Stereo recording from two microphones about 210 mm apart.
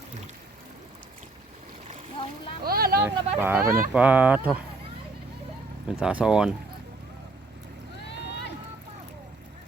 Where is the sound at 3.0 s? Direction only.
10° right (ahead or behind).